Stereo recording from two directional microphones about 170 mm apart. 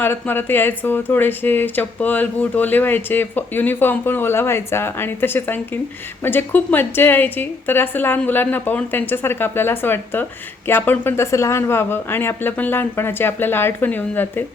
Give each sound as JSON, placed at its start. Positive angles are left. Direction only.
{"t": 0.0, "sound": "speech", "side_deg": 10}